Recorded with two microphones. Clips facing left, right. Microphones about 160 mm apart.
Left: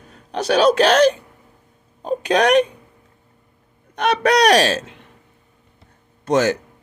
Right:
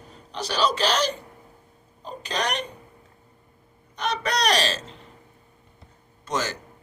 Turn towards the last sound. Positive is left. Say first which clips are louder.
# left 11 dB
turn(degrees=60)  # may be behind; listen again after turning